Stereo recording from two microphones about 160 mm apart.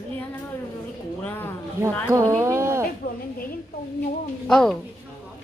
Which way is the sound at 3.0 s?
65° left (ahead or behind).